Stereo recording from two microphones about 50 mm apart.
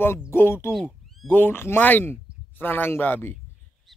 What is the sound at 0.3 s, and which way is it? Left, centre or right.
Speech, left.